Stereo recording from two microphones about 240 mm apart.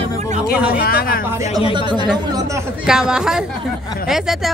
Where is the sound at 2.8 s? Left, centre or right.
Centre.